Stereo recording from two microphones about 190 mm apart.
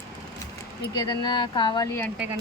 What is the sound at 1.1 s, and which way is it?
Speech, 25° left (ahead or behind).